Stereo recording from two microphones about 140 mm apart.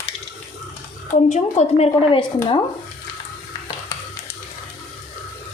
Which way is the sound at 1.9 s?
35° left (ahead or behind).